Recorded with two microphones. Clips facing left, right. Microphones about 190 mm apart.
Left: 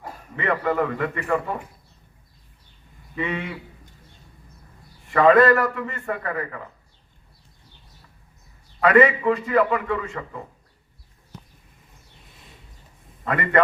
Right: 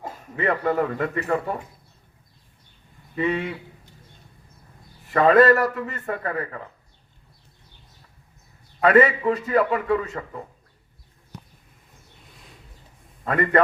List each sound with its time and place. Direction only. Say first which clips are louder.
0.3 s a man's voice: right 1 dB; 40° right (ahead or behind)
3.2 s a man's voice: right 4 dB; 35° right (ahead or behind)
5.1 s a man's voice: even; 35° right (ahead or behind)
8.8 s a man's voice: even; 40° right (ahead or behind)
12.2 s a sound: right 1 dB; centre (ahead or behind)
13.2 s a man's voice: right 3 dB; 40° right (ahead or behind)